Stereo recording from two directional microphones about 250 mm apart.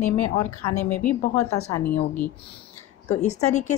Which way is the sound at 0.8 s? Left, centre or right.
Centre.